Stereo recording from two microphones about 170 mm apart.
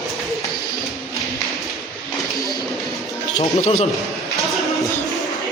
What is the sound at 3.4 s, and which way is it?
Speech, 40° left (ahead or behind).